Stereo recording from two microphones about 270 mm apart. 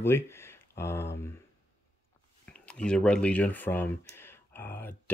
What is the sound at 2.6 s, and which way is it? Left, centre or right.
Speech, centre.